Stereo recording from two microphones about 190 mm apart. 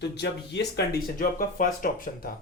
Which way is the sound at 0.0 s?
65° left (ahead or behind).